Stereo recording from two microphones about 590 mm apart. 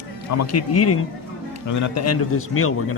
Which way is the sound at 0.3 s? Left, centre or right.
Left.